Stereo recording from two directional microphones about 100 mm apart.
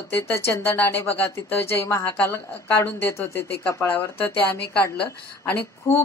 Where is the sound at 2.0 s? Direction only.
15° left (ahead or behind).